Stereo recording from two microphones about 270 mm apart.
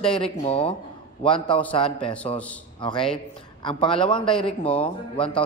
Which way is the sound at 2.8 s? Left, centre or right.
Centre.